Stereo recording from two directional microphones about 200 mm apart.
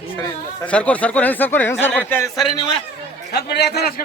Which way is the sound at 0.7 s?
5° left (ahead or behind).